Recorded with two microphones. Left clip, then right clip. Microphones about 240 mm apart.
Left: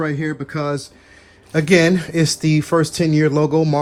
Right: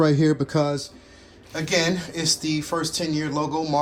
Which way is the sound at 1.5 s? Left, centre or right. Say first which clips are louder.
Left 8 dB; left.